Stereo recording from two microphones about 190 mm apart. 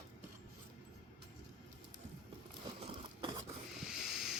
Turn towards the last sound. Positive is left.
turn(degrees=0)  # may be behind; listen again after turning